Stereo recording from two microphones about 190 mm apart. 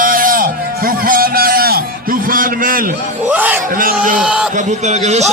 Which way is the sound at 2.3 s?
45° right (ahead or behind).